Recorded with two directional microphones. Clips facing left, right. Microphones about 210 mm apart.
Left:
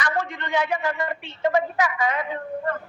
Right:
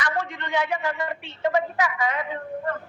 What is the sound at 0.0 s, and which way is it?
A woman's voice, 45° left (ahead or behind).